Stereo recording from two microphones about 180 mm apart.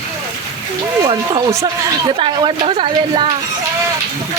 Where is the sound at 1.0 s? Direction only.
20° right (ahead or behind).